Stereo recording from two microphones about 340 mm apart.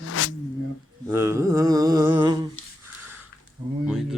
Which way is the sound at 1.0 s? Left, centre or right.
Centre.